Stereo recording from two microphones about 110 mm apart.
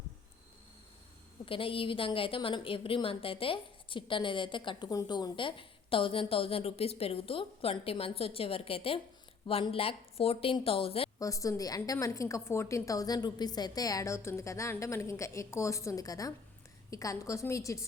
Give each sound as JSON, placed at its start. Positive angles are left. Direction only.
{"t": 1.5, "sound": "a woman's voice", "side_deg": 55}
{"t": 11.2, "sound": "a woman's voice", "side_deg": 30}